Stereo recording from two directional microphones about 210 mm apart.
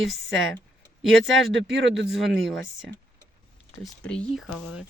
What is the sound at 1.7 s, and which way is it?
Speech, 60° right (ahead or behind).